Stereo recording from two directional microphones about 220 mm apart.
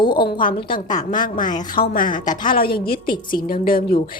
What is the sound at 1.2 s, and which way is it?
Speech, 40° left (ahead or behind).